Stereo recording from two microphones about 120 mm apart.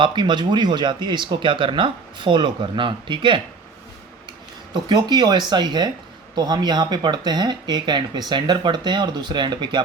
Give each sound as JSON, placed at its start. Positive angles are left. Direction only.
{"t": 0.0, "sound": "speech", "side_deg": -40}
{"t": 4.7, "sound": "speech", "side_deg": -35}